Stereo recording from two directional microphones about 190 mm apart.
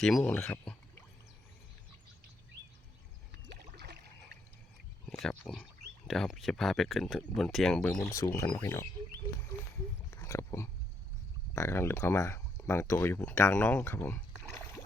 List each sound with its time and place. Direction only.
0.0 s speech: 5° left (ahead or behind)
3.4 s a sound: 60° right (ahead or behind)
5.0 s speech: 5° left (ahead or behind)
8.4 s speech: 15° left (ahead or behind)
10.1 s a sound: 15° left (ahead or behind)
11.5 s speech: 15° left (ahead or behind)